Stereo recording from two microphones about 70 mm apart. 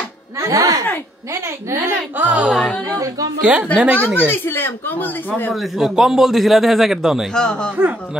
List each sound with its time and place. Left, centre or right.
0.4 s a woman's voice: right
2.1 s speech: right
2.5 s a man's voice: centre
3.3 s a woman's voice: centre
3.9 s speech: left
5.5 s a man's voice: centre
7.3 s speech: centre